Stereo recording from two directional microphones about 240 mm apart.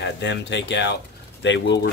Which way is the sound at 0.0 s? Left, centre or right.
Left.